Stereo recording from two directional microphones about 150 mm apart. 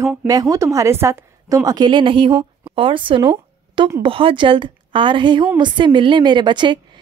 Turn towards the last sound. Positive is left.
turn(degrees=-30)  # may be behind; listen again after turning